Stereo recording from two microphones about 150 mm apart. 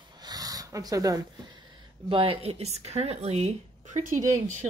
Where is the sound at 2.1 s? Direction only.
35° right (ahead or behind); by 4.2 s 55° right (ahead or behind).